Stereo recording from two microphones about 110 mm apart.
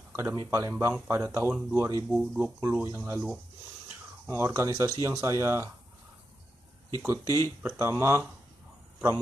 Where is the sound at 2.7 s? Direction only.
25° right (ahead or behind).